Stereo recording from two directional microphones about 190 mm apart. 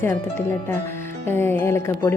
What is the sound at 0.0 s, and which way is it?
Speech, 10° left (ahead or behind).